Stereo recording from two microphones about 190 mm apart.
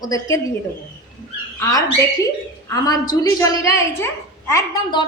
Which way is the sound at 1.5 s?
15° left (ahead or behind).